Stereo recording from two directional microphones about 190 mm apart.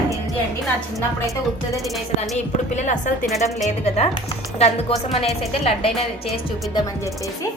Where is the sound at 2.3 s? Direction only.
40° left (ahead or behind).